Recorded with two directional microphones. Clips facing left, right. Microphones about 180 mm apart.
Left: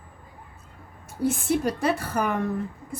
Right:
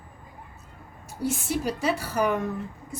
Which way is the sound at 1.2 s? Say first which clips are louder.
Left 4 dB; 55° left (ahead or behind).